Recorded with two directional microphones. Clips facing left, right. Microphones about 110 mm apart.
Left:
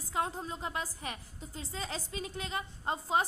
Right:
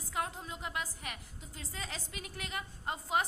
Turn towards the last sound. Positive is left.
turn(degrees=30)  # may be behind; listen again after turning